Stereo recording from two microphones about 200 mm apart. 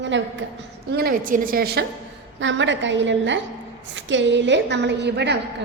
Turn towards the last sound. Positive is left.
turn(degrees=-55)  # may be behind; listen again after turning